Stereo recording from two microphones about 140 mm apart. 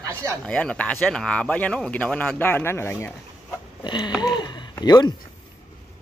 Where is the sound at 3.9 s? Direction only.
30° left (ahead or behind).